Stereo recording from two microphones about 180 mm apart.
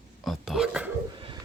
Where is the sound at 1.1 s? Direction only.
25° right (ahead or behind).